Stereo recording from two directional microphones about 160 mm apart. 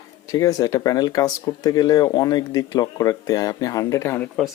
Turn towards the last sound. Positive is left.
turn(degrees=15)  # may be behind; listen again after turning